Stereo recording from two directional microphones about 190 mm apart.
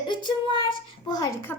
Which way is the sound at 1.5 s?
10° left (ahead or behind).